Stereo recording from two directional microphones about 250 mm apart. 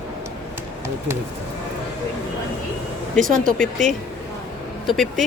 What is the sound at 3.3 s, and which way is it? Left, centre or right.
Speech, right.